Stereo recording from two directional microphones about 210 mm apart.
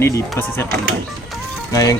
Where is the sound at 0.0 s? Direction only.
10° left (ahead or behind).